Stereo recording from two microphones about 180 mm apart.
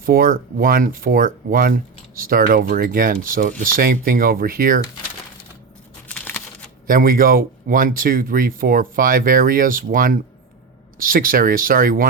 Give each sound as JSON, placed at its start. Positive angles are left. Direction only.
{"t": 0.0, "sound": "speech", "side_deg": -55}
{"t": 6.1, "sound": "a sound", "side_deg": 5}
{"t": 6.8, "sound": "speech", "side_deg": -50}